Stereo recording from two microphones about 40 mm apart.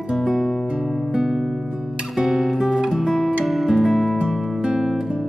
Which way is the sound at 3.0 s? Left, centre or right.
Centre.